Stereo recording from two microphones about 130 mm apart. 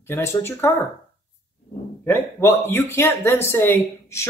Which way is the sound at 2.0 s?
15° left (ahead or behind).